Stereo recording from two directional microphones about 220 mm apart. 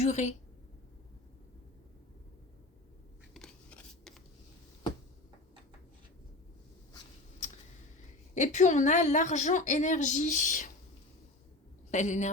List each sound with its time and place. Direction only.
0.0 s a woman's voice: 30° left (ahead or behind)
3.3 s a sound: 5° left (ahead or behind)
8.4 s a woman's voice: 35° left (ahead or behind)
11.9 s speech: 35° left (ahead or behind)